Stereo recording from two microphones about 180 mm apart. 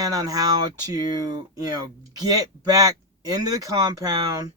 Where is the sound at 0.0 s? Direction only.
20° right (ahead or behind).